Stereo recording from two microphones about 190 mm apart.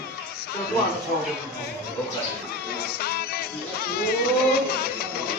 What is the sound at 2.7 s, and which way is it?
Music, 55° left (ahead or behind).